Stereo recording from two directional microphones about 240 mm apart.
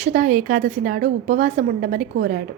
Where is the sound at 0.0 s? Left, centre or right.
Right.